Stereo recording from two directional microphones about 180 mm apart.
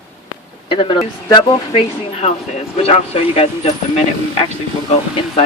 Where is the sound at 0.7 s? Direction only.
30° left (ahead or behind).